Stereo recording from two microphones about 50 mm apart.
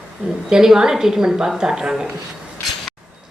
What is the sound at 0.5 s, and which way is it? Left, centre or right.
A woman's voice, centre.